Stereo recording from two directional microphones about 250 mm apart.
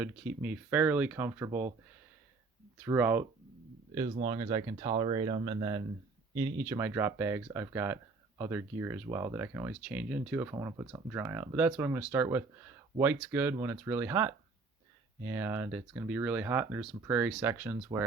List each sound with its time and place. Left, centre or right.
0.0 s speech: centre
2.8 s speech: centre
4.1 s speech: centre